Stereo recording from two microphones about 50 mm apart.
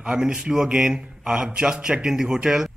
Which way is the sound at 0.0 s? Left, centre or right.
Centre.